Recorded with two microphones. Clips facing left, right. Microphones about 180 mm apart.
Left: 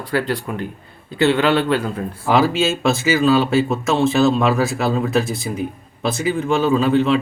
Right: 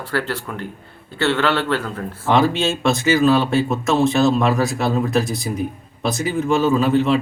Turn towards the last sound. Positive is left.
turn(degrees=0)  # may be behind; listen again after turning